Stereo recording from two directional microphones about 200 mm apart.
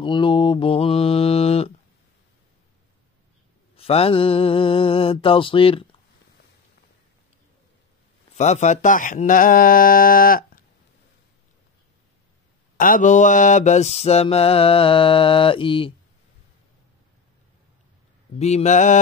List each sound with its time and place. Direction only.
0.0 s mantra: 25° left (ahead or behind)
3.7 s mantra: 30° left (ahead or behind)
8.4 s speech: 35° left (ahead or behind)
12.7 s mantra: 40° left (ahead or behind); by 15.9 s 25° left (ahead or behind)
18.4 s mantra: 35° left (ahead or behind)